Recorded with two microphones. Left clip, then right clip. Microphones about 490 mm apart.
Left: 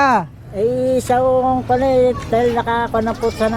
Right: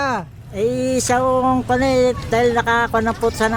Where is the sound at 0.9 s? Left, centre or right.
Right.